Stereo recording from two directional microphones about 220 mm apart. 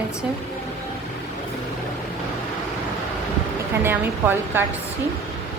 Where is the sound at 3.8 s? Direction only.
10° right (ahead or behind).